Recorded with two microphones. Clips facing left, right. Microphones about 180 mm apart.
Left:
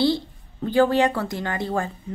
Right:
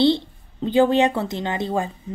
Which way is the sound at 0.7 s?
20° right (ahead or behind).